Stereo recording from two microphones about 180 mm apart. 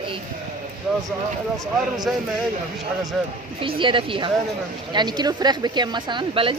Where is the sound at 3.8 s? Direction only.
30° right (ahead or behind).